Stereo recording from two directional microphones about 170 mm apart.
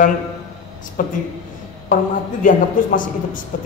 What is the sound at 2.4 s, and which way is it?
Speech, 50° left (ahead or behind).